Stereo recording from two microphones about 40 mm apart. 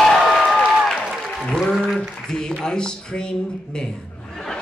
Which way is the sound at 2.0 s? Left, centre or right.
Centre.